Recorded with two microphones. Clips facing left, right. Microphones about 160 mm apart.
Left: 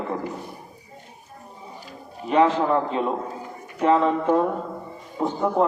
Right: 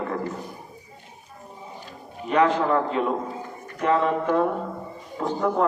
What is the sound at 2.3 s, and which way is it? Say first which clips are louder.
Speech: left 1 dB; 25° left (ahead or behind).